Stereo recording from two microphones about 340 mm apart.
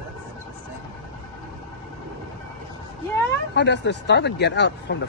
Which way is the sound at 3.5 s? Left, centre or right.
Left.